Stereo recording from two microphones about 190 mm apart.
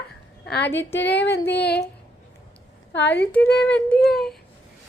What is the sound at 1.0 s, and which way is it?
Speech, 65° left (ahead or behind).